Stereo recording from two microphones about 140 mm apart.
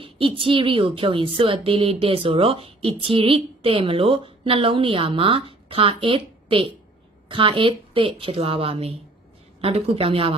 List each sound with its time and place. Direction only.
0.0 s a woman's voice: 40° right (ahead or behind)